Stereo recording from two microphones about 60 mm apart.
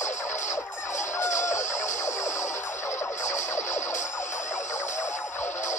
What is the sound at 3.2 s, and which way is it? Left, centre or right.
Music, left.